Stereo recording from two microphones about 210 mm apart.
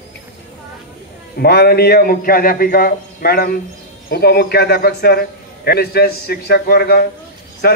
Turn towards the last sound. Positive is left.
turn(degrees=45)  # may be behind; listen again after turning